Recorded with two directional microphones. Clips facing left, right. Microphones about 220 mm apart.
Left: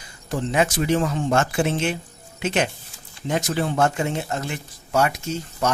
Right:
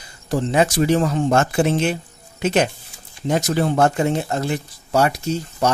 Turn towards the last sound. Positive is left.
turn(degrees=-35)  # may be behind; listen again after turning